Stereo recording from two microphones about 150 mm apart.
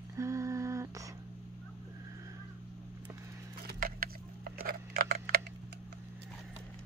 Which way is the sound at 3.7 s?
85° right.